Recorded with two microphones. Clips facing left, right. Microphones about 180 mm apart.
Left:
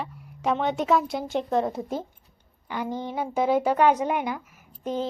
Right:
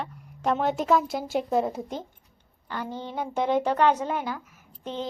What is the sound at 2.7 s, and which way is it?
Speech, 15° left (ahead or behind).